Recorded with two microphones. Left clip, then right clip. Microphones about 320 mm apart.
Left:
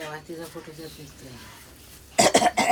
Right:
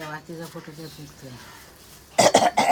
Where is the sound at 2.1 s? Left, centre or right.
Right.